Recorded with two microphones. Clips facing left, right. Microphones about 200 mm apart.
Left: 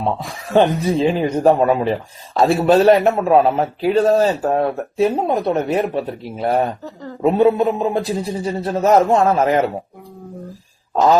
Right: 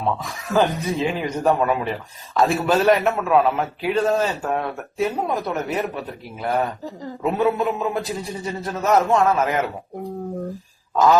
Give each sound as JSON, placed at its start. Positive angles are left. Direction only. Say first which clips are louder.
{"t": 0.2, "sound": "speech", "louder": "left 8 dB", "side_deg": 30}